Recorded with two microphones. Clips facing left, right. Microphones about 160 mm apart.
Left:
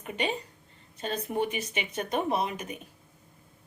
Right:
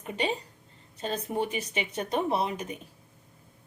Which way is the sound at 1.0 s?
35° right (ahead or behind).